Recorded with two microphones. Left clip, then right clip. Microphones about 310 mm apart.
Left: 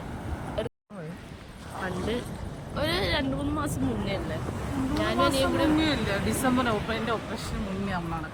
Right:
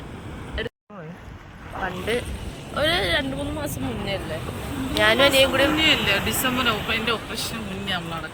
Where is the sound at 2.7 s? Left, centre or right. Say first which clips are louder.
Right 6 dB; centre.